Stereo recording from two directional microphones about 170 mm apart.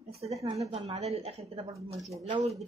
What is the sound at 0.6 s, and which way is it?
Speech, 35° right (ahead or behind).